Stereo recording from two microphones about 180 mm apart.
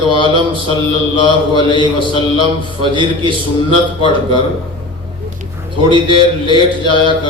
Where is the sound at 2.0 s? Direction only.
25° left (ahead or behind).